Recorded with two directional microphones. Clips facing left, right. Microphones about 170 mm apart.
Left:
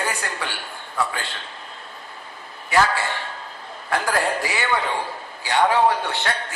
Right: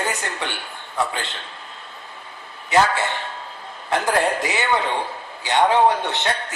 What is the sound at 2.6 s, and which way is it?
A woman's voice, 20° right (ahead or behind).